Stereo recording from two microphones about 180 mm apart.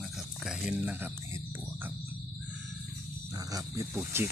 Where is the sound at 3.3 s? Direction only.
20° right (ahead or behind).